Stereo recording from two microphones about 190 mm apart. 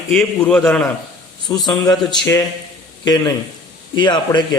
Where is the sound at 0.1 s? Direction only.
5° left (ahead or behind).